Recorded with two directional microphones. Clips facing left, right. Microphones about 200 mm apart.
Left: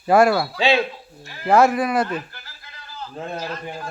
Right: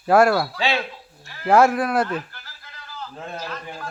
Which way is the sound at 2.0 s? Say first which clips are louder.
Even; 20° left (ahead or behind).